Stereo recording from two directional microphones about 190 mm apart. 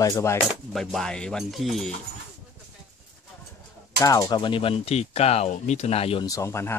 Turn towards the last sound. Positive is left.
turn(degrees=15)  # may be behind; listen again after turning